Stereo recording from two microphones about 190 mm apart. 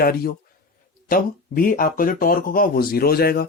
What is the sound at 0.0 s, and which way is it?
Speech, 50° left (ahead or behind).